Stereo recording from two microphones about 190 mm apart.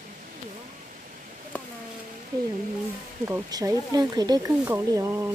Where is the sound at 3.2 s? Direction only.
15° right (ahead or behind).